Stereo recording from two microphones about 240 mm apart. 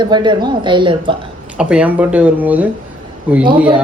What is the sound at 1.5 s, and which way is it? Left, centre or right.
A man's voice, centre.